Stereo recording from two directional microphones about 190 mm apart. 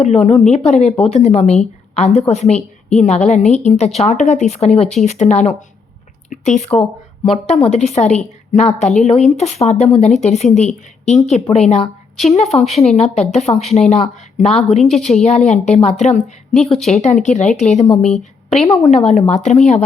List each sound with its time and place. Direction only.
0.0 s speech: 35° left (ahead or behind)
14.8 s a woman's voice: centre (ahead or behind)
15.1 s speech: 35° left (ahead or behind)